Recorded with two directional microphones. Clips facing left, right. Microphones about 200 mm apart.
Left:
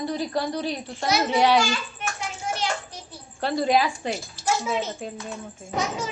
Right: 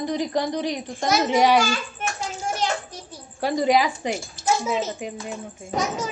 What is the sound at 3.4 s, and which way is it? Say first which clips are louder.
Speech: right 2 dB; 15° right (ahead or behind).